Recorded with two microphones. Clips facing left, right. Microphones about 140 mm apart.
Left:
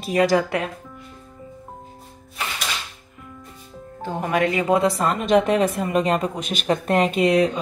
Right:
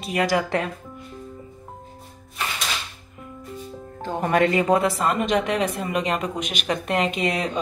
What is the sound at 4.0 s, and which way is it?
Speech, 5° left (ahead or behind).